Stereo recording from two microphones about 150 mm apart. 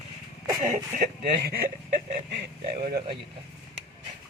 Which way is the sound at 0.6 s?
70° right (ahead or behind).